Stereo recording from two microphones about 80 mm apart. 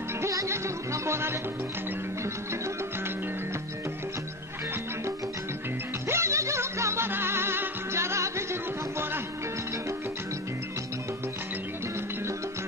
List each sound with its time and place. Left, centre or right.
0.2 s music: right
6.0 s music: right